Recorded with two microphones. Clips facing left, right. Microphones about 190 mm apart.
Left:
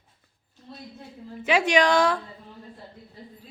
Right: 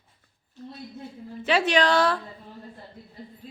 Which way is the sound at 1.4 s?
15° left (ahead or behind).